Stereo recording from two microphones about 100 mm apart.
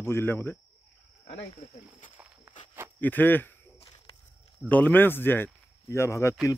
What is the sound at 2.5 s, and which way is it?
Walk, 15° right (ahead or behind).